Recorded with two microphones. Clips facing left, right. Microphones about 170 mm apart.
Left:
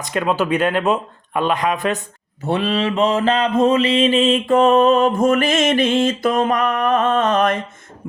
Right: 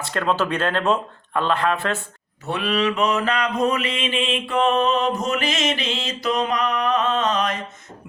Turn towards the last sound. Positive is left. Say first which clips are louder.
# left 5 dB
turn(degrees=50)  # may be behind; listen again after turning